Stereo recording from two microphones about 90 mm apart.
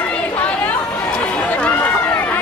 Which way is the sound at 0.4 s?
15° left (ahead or behind).